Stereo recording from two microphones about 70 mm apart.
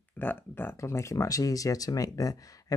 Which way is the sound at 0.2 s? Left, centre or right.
Left.